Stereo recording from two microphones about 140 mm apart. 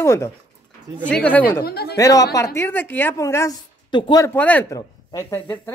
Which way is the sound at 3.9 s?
35° left (ahead or behind).